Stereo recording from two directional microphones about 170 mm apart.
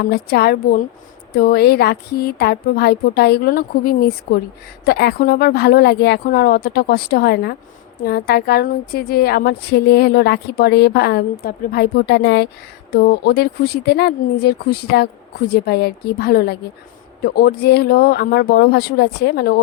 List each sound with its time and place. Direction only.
0.0 s a woman's voice: 70° left (ahead or behind)
12.9 s a woman's voice: 65° left (ahead or behind)